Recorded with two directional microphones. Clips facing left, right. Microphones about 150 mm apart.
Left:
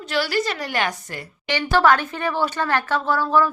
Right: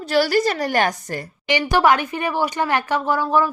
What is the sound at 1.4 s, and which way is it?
Speech, 15° right (ahead or behind).